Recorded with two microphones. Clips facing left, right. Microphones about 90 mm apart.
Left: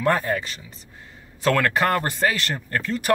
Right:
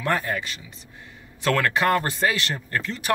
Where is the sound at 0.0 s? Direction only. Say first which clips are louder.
Left 3 dB; 35° left (ahead or behind).